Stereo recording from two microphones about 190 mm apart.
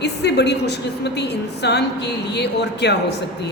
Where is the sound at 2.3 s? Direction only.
60° left (ahead or behind).